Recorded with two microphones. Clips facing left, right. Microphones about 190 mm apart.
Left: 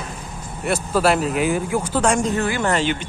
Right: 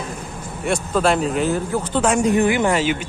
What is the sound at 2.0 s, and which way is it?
Speech, 5° right (ahead or behind).